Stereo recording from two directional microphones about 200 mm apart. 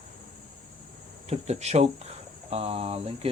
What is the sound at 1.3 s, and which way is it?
Speech, 35° right (ahead or behind).